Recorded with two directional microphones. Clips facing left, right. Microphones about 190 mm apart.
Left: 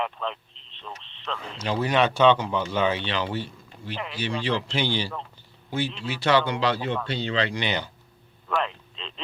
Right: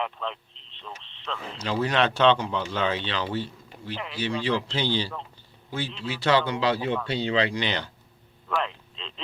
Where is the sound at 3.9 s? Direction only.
55° left (ahead or behind).